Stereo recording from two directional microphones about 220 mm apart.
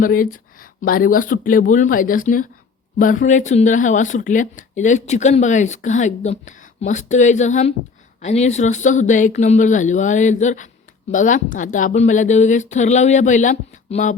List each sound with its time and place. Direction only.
0.0 s speech: 40° left (ahead or behind)